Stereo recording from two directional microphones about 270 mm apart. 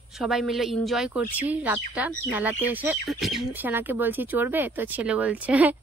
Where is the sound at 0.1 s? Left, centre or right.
Centre.